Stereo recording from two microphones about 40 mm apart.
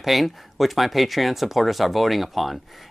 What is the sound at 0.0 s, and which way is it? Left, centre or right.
Speech, centre.